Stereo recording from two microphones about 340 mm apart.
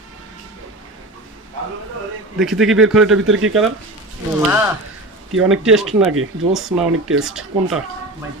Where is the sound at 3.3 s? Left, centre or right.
Right.